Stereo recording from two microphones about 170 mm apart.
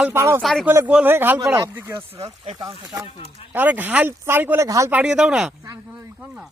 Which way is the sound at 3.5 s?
10° right (ahead or behind).